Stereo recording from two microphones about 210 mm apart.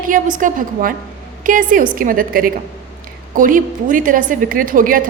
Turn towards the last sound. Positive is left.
turn(degrees=-40)  # may be behind; listen again after turning